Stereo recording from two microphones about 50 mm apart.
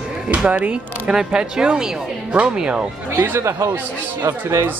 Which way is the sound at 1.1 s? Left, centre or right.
Centre.